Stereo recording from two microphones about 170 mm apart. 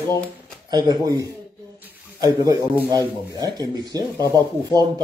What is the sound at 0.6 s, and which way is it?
Speech, 25° right (ahead or behind).